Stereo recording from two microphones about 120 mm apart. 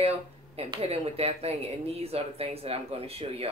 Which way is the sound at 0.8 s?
55° right (ahead or behind).